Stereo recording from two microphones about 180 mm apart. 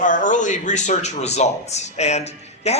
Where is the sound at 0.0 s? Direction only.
45° left (ahead or behind).